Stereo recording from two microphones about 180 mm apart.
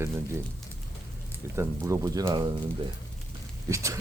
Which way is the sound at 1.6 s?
15° right (ahead or behind).